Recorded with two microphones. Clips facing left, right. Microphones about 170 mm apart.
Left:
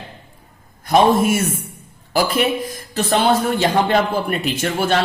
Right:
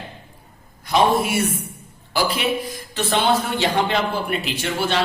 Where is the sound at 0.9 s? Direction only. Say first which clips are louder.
Left 4 dB; 45° left (ahead or behind).